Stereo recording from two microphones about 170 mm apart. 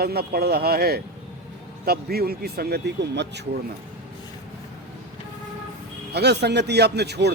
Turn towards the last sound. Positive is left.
turn(degrees=-80)